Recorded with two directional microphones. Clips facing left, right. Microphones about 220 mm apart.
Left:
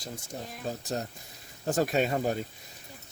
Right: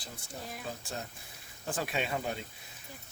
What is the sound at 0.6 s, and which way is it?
Speech, 40° left (ahead or behind).